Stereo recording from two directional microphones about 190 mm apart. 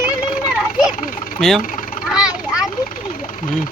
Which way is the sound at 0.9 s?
45° left (ahead or behind).